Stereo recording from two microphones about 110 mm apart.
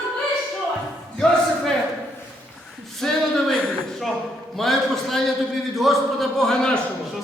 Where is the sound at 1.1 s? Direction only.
5° left (ahead or behind).